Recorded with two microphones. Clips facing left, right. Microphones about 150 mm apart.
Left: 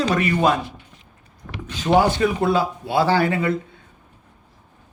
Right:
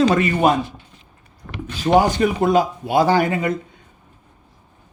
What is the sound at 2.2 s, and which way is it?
Speech, 15° right (ahead or behind).